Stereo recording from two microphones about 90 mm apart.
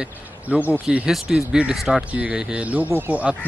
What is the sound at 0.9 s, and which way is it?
Speech, 5° right (ahead or behind).